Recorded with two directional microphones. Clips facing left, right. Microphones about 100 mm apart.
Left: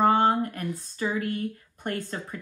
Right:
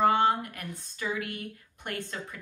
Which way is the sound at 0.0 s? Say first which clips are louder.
Left 3 dB; 40° left (ahead or behind).